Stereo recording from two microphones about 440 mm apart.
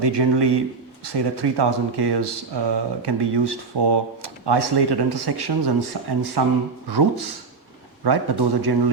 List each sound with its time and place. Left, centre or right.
0.0 s speech: right